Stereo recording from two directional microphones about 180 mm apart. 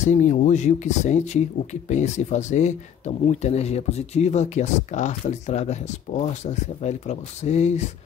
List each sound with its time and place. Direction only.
0.0 s speech: 40° left (ahead or behind)